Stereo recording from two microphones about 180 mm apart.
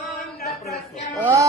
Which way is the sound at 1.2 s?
15° right (ahead or behind).